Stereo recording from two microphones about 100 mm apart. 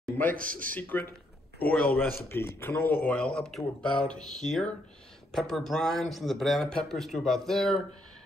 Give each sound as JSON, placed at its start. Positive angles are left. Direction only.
{"t": 0.2, "sound": "a man's voice", "side_deg": 20}